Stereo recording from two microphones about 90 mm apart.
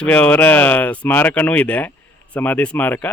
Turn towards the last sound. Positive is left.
turn(degrees=20)  # may be behind; listen again after turning